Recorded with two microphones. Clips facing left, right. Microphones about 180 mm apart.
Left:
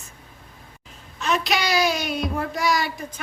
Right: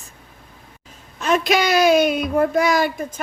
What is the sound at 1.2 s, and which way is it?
Speech, 50° right (ahead or behind).